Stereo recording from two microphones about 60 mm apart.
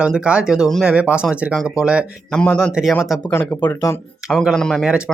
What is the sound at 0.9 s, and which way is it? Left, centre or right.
Speech, centre.